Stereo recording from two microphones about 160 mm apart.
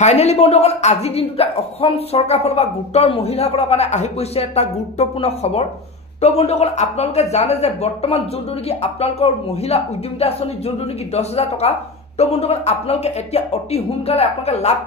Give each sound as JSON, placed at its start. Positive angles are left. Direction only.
{"t": 0.0, "sound": "speech", "side_deg": 45}